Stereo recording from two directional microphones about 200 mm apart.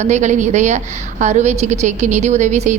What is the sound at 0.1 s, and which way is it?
A woman's voice, 35° right (ahead or behind).